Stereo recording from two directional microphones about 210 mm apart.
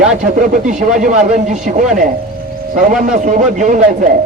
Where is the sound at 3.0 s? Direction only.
35° right (ahead or behind).